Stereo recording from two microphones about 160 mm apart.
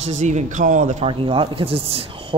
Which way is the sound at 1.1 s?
35° right (ahead or behind).